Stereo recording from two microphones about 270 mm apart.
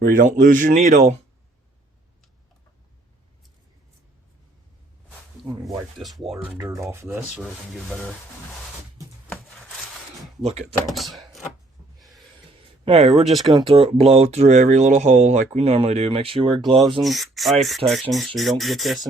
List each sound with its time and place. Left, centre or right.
0.0 s speech: right
5.6 s speech: centre
6.6 s rub: centre
9.3 s a sound: centre
10.4 s speech: right
10.8 s speech: centre
11.9 s a sound: centre
12.8 s speech: right
13.3 s speech: centre
13.6 s speech: right
17.0 s speech: centre